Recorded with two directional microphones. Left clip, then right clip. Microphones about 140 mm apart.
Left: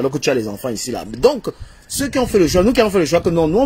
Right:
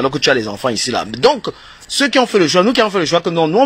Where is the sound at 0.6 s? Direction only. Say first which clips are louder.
Right 7 dB; 15° left (ahead or behind).